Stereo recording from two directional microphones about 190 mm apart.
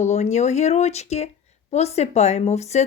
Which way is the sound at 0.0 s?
35° left (ahead or behind).